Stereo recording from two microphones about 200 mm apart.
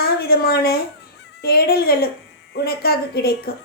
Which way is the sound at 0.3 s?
50° left (ahead or behind).